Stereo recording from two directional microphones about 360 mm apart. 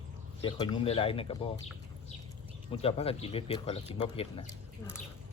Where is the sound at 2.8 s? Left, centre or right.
Centre.